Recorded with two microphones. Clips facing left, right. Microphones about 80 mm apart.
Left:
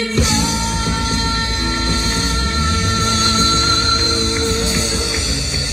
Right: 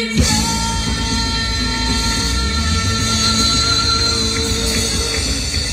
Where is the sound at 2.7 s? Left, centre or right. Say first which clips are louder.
Left 3 dB; left.